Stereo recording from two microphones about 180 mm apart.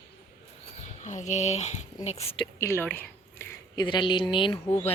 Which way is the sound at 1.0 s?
40° left (ahead or behind).